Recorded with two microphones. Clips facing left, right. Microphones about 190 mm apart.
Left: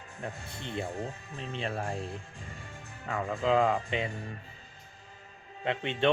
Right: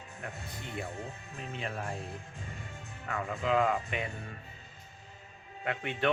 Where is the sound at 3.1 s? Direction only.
30° left (ahead or behind).